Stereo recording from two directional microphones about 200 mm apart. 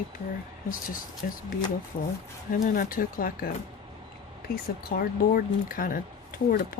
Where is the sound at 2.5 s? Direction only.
45° left (ahead or behind).